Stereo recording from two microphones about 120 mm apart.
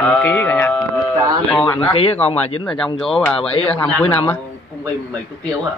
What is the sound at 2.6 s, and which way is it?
Speech, 5° left (ahead or behind).